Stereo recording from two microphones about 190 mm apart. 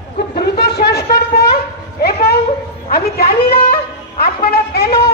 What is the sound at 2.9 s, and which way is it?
Speech, 55° left (ahead or behind).